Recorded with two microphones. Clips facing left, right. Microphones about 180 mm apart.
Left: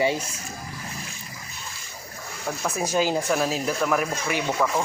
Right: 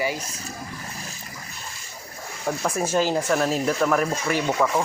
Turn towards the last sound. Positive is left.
turn(degrees=5)  # may be behind; listen again after turning